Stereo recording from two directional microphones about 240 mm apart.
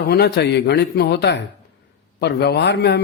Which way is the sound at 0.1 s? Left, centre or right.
Left.